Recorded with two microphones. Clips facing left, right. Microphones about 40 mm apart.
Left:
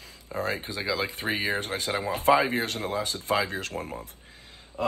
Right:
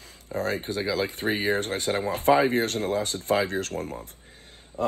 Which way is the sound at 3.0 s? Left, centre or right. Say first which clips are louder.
Right 2 dB; right.